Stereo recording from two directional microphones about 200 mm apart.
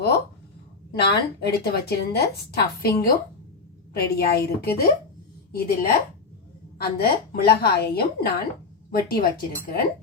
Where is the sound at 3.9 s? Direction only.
50° left (ahead or behind).